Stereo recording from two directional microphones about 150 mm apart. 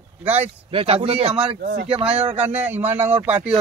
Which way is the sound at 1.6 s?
90° right.